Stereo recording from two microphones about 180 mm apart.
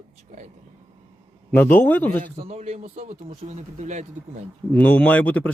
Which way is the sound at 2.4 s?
35° right (ahead or behind).